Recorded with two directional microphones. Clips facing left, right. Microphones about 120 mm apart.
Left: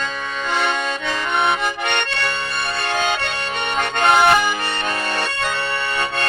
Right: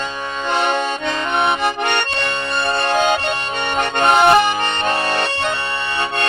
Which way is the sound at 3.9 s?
20° right (ahead or behind).